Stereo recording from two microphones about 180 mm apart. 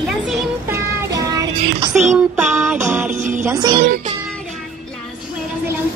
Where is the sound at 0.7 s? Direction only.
20° right (ahead or behind).